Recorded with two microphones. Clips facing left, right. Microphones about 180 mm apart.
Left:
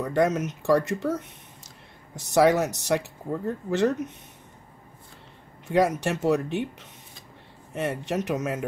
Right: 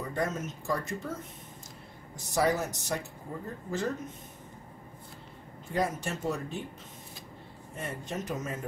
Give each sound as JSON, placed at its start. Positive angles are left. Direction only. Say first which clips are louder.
{"t": 0.0, "sound": "speech", "louder": "left 9 dB", "side_deg": 75}
{"t": 5.7, "sound": "speech", "louder": "left 8 dB", "side_deg": 80}
{"t": 7.7, "sound": "speech", "louder": "left 9 dB", "side_deg": 75}